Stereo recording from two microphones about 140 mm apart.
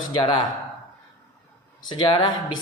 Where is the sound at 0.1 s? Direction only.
35° left (ahead or behind).